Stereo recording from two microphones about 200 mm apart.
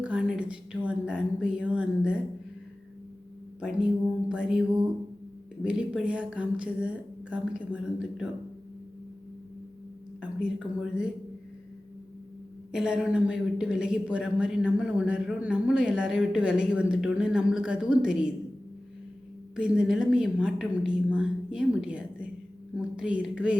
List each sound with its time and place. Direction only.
0.0 s a woman's voice: 5° right (ahead or behind)
3.6 s a woman's voice: 5° right (ahead or behind)
5.6 s a woman's voice: 5° right (ahead or behind)
10.2 s a woman's voice: 5° right (ahead or behind)
12.7 s a woman's voice: 5° right (ahead or behind)
19.5 s a woman's voice: 5° right (ahead or behind)